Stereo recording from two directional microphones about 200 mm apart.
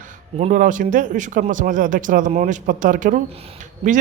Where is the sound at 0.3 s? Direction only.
40° right (ahead or behind).